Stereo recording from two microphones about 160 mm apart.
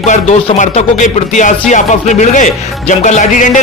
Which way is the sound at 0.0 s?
45° left (ahead or behind).